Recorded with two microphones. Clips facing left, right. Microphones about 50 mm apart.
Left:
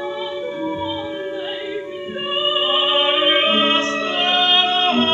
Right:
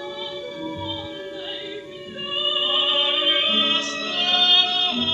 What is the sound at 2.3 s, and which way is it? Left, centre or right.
Music, left.